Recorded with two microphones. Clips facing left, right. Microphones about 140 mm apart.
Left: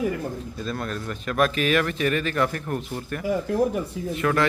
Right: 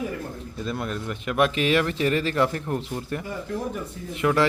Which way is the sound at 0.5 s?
20° right (ahead or behind).